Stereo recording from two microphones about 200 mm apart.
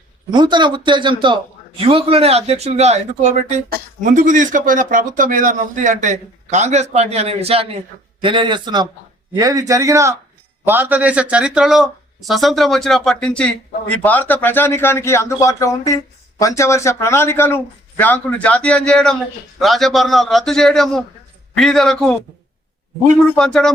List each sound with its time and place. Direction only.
0.3 s a man's voice: 20° right (ahead or behind); by 22.1 s centre (ahead or behind)
23.3 s a man's voice: 5° left (ahead or behind)